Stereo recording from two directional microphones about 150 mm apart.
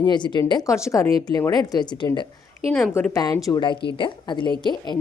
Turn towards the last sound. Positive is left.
turn(degrees=30)  # may be behind; listen again after turning